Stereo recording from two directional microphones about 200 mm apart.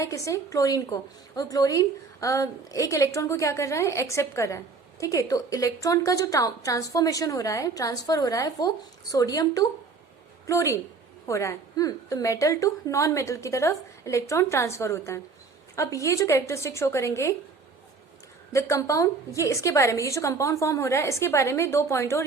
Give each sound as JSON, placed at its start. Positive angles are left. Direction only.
{"t": 0.0, "sound": "a woman's voice", "side_deg": 15}
{"t": 18.5, "sound": "a woman's voice", "side_deg": 15}